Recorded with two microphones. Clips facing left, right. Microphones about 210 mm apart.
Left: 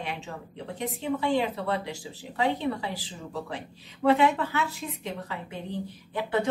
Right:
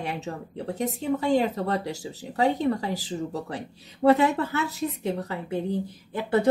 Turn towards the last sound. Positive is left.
turn(degrees=-40)  # may be behind; listen again after turning